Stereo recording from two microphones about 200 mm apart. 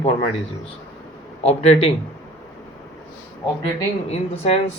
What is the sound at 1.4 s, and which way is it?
Speech, 30° left (ahead or behind).